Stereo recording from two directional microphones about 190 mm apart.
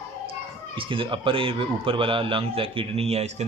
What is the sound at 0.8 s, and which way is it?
Speech, 25° right (ahead or behind).